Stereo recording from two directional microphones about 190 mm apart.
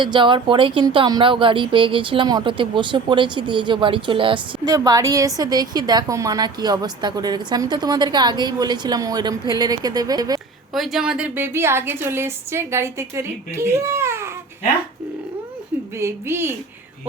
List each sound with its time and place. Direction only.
0.0 s speech: 25° right (ahead or behind)
10.8 s a woman's voice: centre (ahead or behind)
16.0 s a woman's voice: 15° right (ahead or behind)